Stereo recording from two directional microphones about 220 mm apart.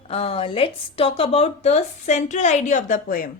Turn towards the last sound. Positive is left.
turn(degrees=40)  # may be behind; listen again after turning